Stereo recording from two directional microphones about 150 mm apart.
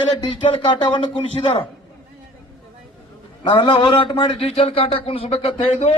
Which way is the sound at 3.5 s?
30° left (ahead or behind).